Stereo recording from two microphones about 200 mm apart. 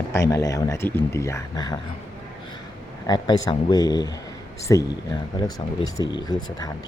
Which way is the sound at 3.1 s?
20° left (ahead or behind).